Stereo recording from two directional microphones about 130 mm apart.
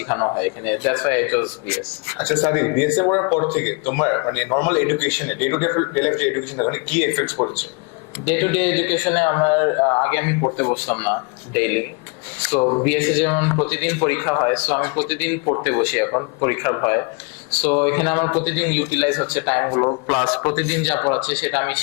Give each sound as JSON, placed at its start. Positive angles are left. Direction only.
{"t": 0.1, "sound": "speech", "side_deg": 25}
{"t": 12.6, "sound": "speech", "side_deg": 25}
{"t": 12.9, "sound": "speech", "side_deg": 15}
{"t": 20.1, "sound": "speech", "side_deg": 15}